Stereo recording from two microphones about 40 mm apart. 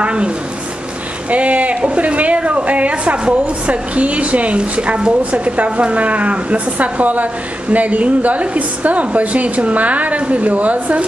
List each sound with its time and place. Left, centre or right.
0.0 s speech: right
1.3 s a woman's voice: right